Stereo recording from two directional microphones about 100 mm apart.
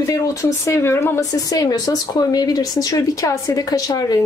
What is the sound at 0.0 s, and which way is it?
Speech, 35° left (ahead or behind).